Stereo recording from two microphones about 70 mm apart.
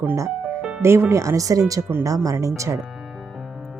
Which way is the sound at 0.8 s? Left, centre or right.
Right.